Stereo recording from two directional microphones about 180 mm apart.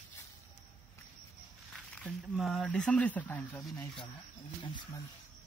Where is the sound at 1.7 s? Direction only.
5° left (ahead or behind).